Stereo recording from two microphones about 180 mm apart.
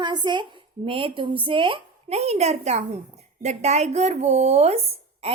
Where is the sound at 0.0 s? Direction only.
25° right (ahead or behind).